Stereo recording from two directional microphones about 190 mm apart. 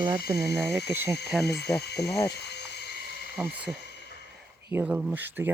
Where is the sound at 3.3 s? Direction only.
Centre (ahead or behind).